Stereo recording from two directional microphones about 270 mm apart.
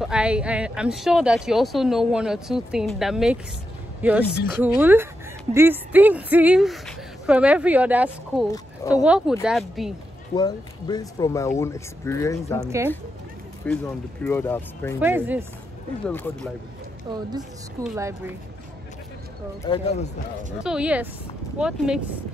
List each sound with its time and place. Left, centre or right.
0.0 s speech: centre
10.3 s speech: centre
12.6 s speech: centre
13.7 s speech: centre
15.0 s speech: centre
17.8 s speech: centre
19.6 s speech: left
20.6 s speech: centre